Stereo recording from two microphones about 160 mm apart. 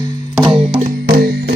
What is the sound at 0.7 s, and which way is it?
Music, 60° right (ahead or behind).